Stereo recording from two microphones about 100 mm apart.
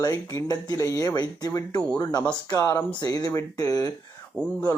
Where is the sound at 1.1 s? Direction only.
45° left (ahead or behind).